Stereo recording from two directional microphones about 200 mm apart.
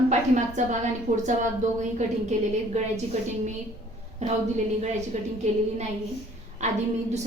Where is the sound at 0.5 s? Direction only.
35° right (ahead or behind).